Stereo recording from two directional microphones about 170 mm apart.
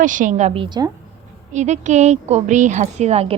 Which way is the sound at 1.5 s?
45° right (ahead or behind).